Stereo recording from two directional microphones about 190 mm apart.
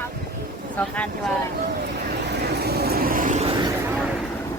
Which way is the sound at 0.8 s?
5° left (ahead or behind).